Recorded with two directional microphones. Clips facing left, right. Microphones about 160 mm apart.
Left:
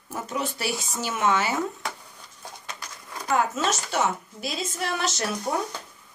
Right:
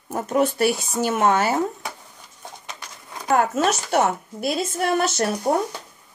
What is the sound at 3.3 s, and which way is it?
A woman's voice, 50° right (ahead or behind).